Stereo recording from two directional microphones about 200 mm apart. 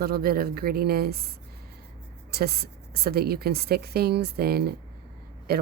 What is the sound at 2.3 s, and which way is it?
Speech, 50° right (ahead or behind).